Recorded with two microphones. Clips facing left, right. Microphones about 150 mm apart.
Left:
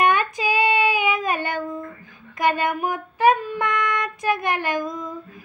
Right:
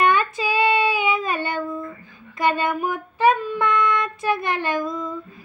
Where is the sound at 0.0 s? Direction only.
15° left (ahead or behind).